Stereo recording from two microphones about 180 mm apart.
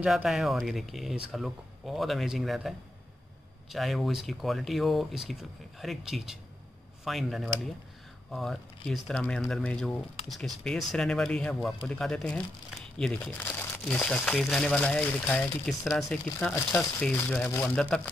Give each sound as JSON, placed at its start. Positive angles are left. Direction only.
{"t": 0.0, "sound": "speech", "side_deg": -5}
{"t": 3.7, "sound": "speech", "side_deg": 0}